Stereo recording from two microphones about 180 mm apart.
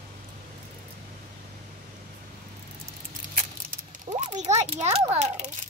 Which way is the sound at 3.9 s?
40° right (ahead or behind).